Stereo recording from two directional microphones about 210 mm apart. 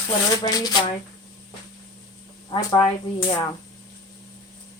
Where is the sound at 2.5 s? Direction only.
20° left (ahead or behind).